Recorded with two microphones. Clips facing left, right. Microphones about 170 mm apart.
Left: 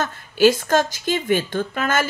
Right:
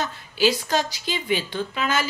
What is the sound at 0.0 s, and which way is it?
A woman's voice, 50° left (ahead or behind).